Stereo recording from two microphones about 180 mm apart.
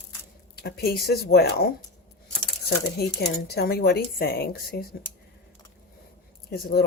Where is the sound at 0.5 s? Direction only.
60° left (ahead or behind).